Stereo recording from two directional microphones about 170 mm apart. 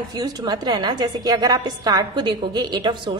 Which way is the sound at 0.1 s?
25° right (ahead or behind).